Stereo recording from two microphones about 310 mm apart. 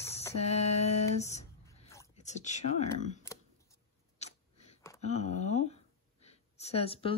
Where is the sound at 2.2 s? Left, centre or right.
Left.